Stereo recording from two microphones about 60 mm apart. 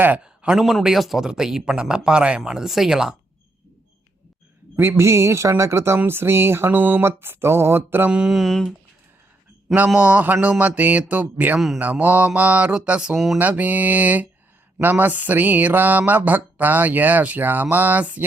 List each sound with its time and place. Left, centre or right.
0.6 s speech: centre
4.8 s speech: right
6.7 s a sound: right
7.0 s a sound: right
8.1 s speech: centre
8.4 s speech: centre
9.9 s speech: right
13.1 s speech: centre
13.4 s speech: right